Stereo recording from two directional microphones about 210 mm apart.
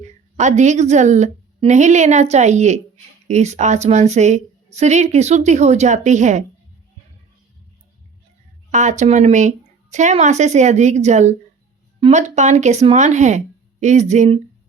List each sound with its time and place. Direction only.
0.0 s a woman's voice: 35° right (ahead or behind)
8.7 s a woman's voice: 35° right (ahead or behind)